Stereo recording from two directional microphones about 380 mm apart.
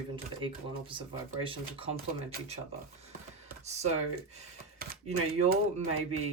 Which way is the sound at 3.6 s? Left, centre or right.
Centre.